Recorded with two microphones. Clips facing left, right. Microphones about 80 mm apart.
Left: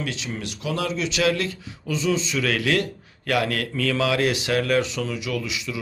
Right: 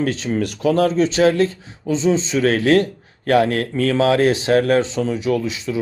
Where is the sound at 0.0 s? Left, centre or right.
Right.